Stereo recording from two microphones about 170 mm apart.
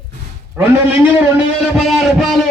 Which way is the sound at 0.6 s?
15° right (ahead or behind).